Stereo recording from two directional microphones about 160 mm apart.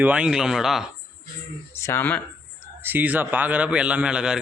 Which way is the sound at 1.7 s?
15° left (ahead or behind).